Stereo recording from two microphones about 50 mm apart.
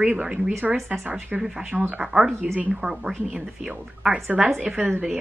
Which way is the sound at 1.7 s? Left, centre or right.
Right.